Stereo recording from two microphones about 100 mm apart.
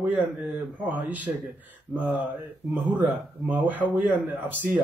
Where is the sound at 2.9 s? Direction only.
15° right (ahead or behind).